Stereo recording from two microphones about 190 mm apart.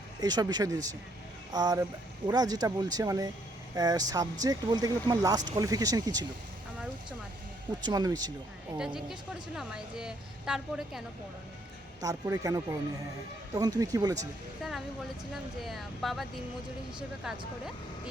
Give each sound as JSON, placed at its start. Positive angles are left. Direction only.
{"t": 0.2, "sound": "speech", "side_deg": -20}
{"t": 7.8, "sound": "speech", "side_deg": -20}
{"t": 9.6, "sound": "a woman's voice", "side_deg": -5}
{"t": 12.0, "sound": "speech", "side_deg": -20}
{"t": 14.6, "sound": "a woman's voice", "side_deg": 0}
{"t": 17.2, "sound": "a woman's voice", "side_deg": 0}